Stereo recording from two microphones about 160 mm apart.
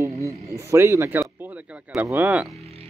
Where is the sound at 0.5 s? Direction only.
20° right (ahead or behind).